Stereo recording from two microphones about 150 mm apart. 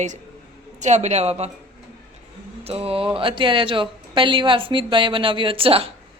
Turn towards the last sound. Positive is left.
turn(degrees=-40)  # may be behind; listen again after turning